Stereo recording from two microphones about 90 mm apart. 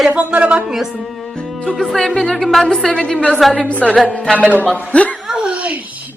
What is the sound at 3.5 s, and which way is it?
Speech, 15° left (ahead or behind).